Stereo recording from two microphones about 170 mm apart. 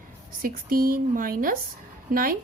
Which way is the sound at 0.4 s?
60° right (ahead or behind).